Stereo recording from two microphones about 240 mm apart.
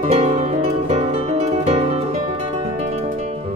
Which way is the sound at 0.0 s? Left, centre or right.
Right.